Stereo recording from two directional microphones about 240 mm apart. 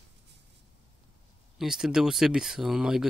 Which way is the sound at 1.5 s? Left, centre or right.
Centre.